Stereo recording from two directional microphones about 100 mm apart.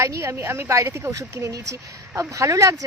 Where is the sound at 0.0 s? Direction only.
30° right (ahead or behind).